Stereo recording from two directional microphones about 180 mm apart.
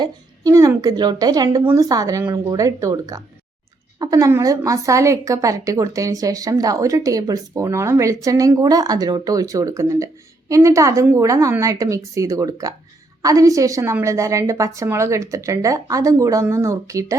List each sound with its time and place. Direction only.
0.0 s a woman's voice: 20° right (ahead or behind)